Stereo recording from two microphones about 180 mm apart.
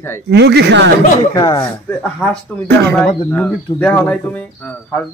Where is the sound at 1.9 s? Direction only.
5° left (ahead or behind).